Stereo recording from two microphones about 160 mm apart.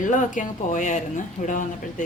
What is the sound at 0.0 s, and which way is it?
A woman's voice, 55° left (ahead or behind).